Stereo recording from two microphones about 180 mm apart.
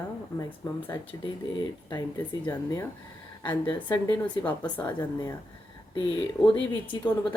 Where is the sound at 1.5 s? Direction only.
25° left (ahead or behind).